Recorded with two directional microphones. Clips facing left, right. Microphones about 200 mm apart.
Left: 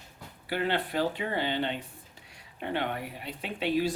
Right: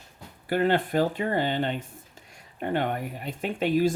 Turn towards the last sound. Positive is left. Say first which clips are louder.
# right 5 dB
turn(degrees=-45)  # may be behind; listen again after turning